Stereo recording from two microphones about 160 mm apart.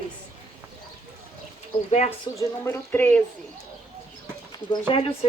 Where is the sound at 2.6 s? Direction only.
10° left (ahead or behind).